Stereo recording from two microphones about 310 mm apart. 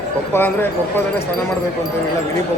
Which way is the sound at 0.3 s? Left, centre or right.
Centre.